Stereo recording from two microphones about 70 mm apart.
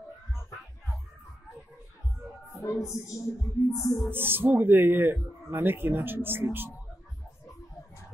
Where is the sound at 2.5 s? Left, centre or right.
Left.